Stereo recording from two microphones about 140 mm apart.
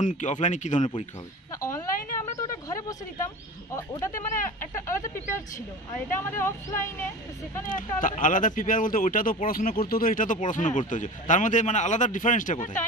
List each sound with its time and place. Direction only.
0.0 s speech: 60° left (ahead or behind)
1.6 s a sound: 20° left (ahead or behind)
3.7 s speech: 20° left (ahead or behind)
6.1 s speech: 20° left (ahead or behind)
7.6 s speech: 75° left (ahead or behind)